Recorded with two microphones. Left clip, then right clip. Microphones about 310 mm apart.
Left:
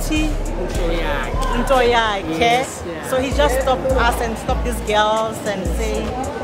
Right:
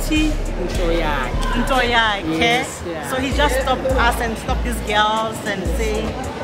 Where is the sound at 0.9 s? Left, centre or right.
Centre.